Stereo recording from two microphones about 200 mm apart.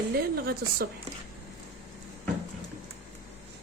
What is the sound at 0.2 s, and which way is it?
Speech, 50° right (ahead or behind).